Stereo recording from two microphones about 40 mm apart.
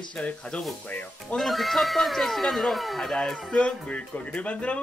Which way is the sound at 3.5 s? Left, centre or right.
Left.